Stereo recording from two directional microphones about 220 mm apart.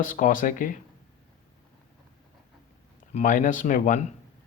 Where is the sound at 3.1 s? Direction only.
35° left (ahead or behind).